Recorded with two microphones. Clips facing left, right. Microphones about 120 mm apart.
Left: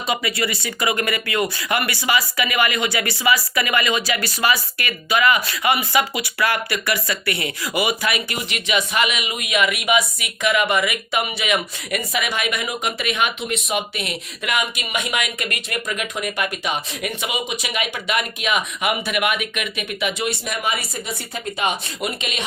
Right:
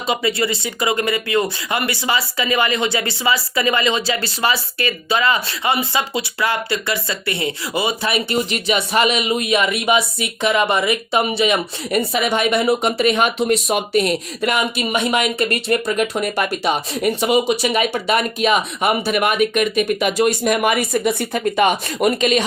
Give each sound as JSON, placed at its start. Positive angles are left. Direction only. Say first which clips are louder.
{"t": 0.1, "sound": "speech", "louder": "right 4 dB", "side_deg": -25}